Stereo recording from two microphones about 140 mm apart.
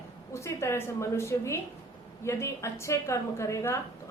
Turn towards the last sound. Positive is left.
turn(degrees=20)  # may be behind; listen again after turning